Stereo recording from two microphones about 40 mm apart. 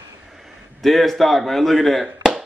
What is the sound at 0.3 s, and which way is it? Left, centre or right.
A man's voice, centre.